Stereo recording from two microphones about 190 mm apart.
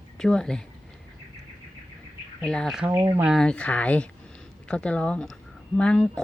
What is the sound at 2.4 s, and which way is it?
Speech, 5° left (ahead or behind).